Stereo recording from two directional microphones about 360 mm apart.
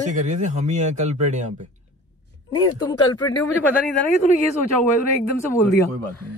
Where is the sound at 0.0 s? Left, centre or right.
Right.